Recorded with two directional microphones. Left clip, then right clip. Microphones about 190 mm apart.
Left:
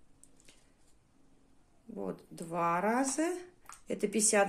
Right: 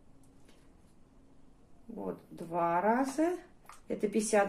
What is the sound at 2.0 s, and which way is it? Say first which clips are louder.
Speech: even; 50° left (ahead or behind).